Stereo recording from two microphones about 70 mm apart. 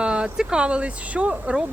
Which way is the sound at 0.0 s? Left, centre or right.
Centre.